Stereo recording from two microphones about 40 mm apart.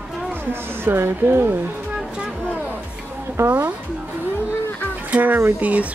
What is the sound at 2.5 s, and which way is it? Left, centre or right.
Music, right.